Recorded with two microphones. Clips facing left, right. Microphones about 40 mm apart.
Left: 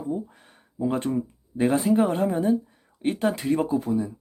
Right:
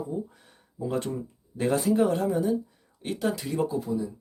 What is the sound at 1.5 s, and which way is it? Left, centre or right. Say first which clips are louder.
Speech: left 3 dB; left.